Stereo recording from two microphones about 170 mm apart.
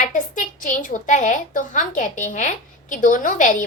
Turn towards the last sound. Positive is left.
turn(degrees=50)  # may be behind; listen again after turning